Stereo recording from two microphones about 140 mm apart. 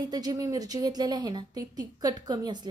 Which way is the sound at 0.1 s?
30° right (ahead or behind).